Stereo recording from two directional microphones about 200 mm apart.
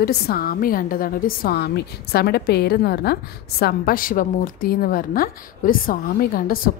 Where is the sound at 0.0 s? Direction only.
50° left (ahead or behind).